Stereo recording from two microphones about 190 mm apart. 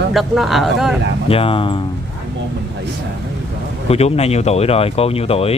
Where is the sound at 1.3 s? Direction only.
30° left (ahead or behind).